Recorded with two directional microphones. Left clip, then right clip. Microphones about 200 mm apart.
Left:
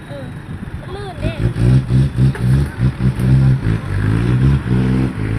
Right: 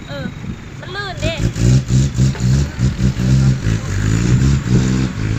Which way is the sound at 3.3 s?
60° right (ahead or behind).